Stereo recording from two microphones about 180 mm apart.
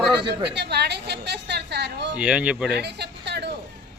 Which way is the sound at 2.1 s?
5° right (ahead or behind).